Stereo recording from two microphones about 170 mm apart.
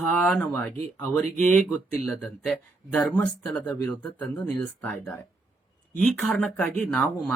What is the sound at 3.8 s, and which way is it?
Speech, 10° left (ahead or behind).